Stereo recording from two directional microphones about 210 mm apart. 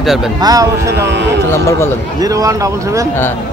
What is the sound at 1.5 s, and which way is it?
Speech, 10° left (ahead or behind).